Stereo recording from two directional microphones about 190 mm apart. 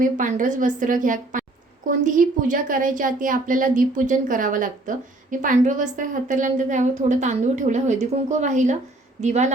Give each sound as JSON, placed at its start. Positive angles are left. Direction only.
{"t": 0.0, "sound": "a woman's voice", "side_deg": -45}